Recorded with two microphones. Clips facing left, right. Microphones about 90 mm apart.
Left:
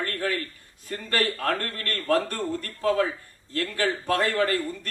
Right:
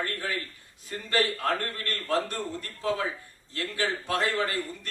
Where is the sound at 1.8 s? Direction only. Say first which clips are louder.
Left 6 dB; 55° left (ahead or behind).